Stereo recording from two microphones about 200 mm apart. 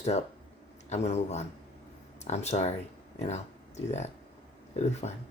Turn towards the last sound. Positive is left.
turn(degrees=35)  # may be behind; listen again after turning